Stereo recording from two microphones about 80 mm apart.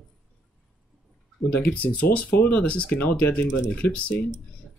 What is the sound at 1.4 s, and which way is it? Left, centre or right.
Speech, centre.